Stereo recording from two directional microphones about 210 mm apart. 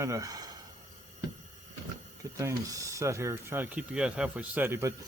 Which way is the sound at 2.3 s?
15° right (ahead or behind).